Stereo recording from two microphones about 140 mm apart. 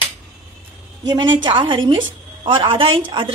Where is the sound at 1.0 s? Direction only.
30° right (ahead or behind).